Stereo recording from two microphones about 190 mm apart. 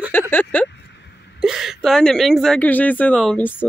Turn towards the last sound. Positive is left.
turn(degrees=10)  # may be behind; listen again after turning